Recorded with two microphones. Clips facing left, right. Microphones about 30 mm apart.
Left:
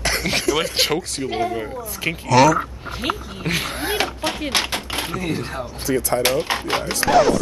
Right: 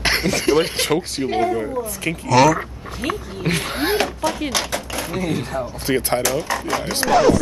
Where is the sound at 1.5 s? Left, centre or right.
Centre.